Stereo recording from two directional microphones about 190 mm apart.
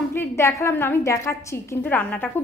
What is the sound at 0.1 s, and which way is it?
A woman's voice, 15° left (ahead or behind).